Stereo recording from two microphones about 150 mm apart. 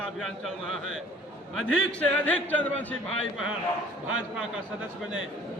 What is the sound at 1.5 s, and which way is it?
A man's voice, 5° left (ahead or behind).